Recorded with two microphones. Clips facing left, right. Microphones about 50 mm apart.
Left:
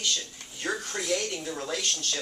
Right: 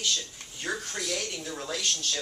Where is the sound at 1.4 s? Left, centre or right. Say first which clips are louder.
Left 2 dB; centre.